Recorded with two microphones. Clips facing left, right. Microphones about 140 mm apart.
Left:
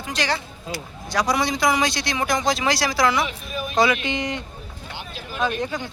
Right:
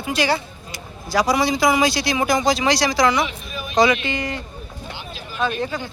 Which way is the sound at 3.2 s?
45° left (ahead or behind).